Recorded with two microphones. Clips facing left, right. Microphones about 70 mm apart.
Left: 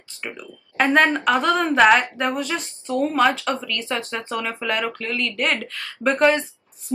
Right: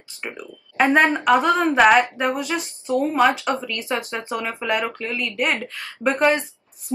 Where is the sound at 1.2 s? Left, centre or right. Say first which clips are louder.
Right 2 dB; centre.